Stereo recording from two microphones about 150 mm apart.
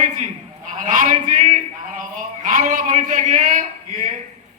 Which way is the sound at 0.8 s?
55° right (ahead or behind).